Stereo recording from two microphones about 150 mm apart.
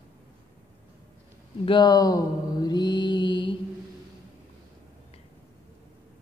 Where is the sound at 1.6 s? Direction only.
30° left (ahead or behind).